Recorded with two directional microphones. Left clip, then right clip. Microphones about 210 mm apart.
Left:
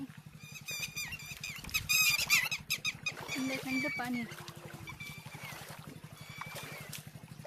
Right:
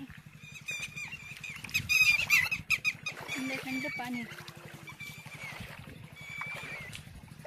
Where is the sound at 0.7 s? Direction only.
20° left (ahead or behind).